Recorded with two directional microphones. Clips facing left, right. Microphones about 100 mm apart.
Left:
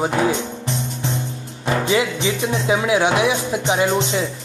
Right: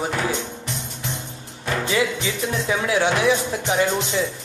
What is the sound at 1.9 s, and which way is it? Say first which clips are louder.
Speech: left 2 dB; 20° left (ahead or behind).